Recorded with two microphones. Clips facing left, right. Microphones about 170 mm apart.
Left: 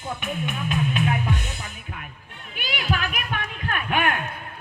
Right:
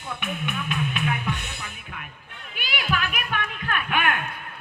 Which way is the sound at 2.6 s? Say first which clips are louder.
Left 1 dB; 40° left (ahead or behind).